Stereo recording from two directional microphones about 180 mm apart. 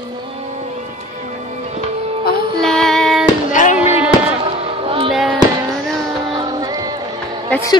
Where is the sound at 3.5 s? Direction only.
45° left (ahead or behind).